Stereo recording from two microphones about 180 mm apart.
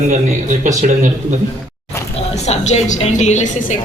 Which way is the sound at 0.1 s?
40° right (ahead or behind).